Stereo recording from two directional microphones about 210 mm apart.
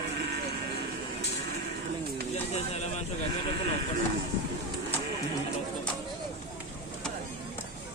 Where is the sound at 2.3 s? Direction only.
30° left (ahead or behind).